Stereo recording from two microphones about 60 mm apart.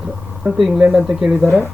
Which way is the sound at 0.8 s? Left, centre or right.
Centre.